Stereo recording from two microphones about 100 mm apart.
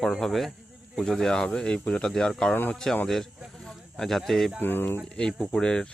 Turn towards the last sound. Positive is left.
turn(degrees=10)  # may be behind; listen again after turning